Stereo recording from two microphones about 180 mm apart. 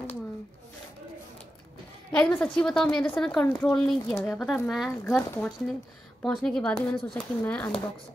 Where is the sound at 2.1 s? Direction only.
5° left (ahead or behind).